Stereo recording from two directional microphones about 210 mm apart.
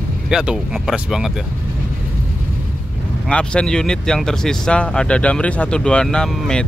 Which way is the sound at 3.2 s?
5° left (ahead or behind).